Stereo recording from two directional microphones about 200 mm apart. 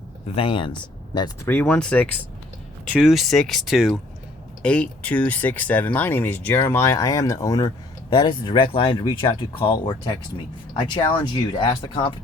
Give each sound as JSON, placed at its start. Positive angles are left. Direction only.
{"t": 0.3, "sound": "speech", "side_deg": 25}
{"t": 1.5, "sound": "speech", "side_deg": 5}